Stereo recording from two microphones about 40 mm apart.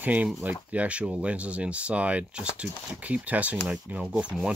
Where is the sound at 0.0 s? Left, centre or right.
Right.